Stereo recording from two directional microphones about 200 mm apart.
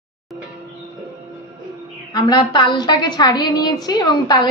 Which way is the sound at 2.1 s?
20° left (ahead or behind).